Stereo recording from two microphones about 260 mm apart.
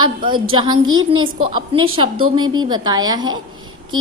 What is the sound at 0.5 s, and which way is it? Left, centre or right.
A woman's voice, centre.